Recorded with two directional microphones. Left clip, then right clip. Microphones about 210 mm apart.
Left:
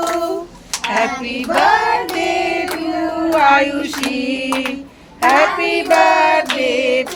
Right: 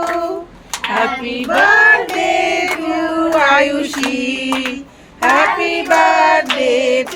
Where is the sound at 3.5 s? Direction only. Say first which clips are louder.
Left 1 dB; 55° right (ahead or behind).